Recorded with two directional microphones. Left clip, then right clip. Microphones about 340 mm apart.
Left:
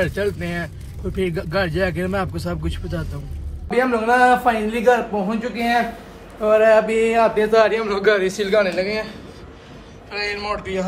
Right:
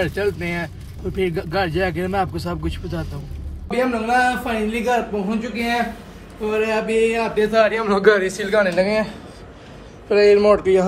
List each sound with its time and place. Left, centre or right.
0.0 s a man's voice: centre
3.7 s a man's voice: left
6.5 s a sound: centre
6.9 s a man's voice: left
7.7 s a man's voice: centre